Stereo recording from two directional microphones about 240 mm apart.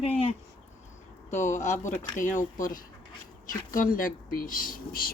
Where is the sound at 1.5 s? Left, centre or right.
Left.